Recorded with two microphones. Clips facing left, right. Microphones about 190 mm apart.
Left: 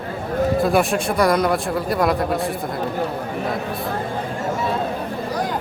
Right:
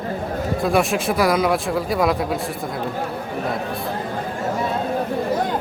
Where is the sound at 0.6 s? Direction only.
Centre (ahead or behind).